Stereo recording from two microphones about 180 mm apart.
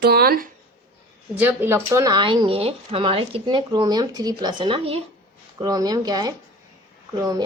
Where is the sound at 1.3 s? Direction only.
10° right (ahead or behind).